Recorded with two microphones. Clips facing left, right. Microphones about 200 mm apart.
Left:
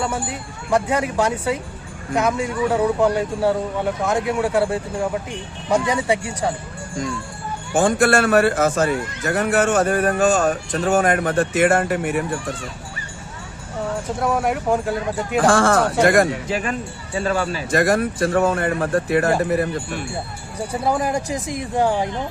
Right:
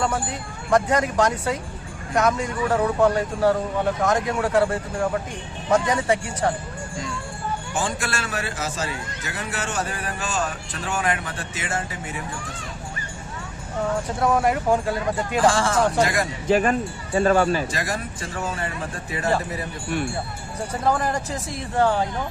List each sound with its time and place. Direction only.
0.0 s speech: 10° left (ahead or behind)
7.7 s a man's voice: 50° left (ahead or behind)
14.2 s speech: centre (ahead or behind)
15.4 s speech: 55° left (ahead or behind)
16.5 s speech: 45° right (ahead or behind)
17.7 s speech: 55° left (ahead or behind)
20.8 s speech: 10° left (ahead or behind)